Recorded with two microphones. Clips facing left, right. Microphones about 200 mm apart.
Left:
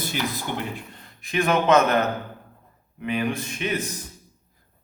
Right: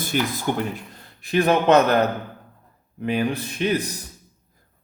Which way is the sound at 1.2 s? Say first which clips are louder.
Right 3 dB; 35° right (ahead or behind).